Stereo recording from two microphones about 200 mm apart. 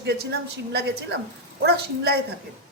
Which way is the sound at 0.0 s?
55° right (ahead or behind).